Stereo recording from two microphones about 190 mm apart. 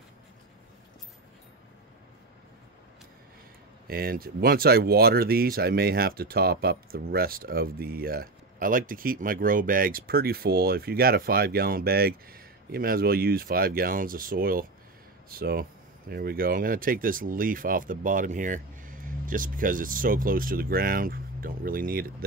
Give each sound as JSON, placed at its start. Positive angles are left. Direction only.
{"t": 3.8, "sound": "speech", "side_deg": -50}